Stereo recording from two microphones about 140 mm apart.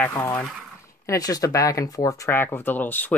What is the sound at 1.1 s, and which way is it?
Speech, 25° left (ahead or behind).